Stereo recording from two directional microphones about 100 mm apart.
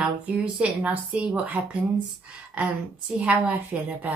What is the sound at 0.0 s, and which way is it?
A woman's voice, 15° right (ahead or behind).